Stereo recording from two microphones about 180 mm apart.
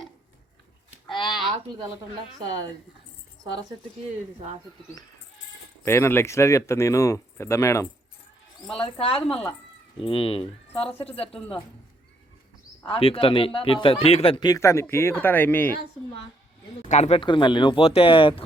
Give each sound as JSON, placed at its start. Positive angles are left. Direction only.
{"t": 1.1, "sound": "a sound", "side_deg": 25}
{"t": 5.8, "sound": "speech", "side_deg": 15}
{"t": 8.8, "sound": "speech", "side_deg": 30}
{"t": 12.9, "sound": "speech", "side_deg": 30}
{"t": 16.9, "sound": "speech", "side_deg": 35}